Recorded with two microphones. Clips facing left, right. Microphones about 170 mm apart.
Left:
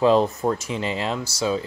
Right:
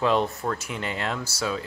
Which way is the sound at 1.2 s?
40° left (ahead or behind).